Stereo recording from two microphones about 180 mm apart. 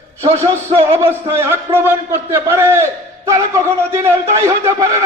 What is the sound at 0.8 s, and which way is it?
A man's voice, 15° right (ahead or behind).